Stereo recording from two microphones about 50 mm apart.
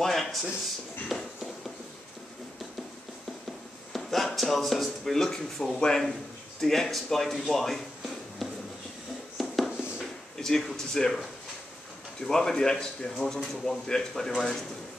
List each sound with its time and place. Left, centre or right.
0.0 s speech: centre
1.0 s a sound: centre
3.9 s speech: centre
9.7 s a sound: centre
10.3 s speech: centre
12.2 s speech: centre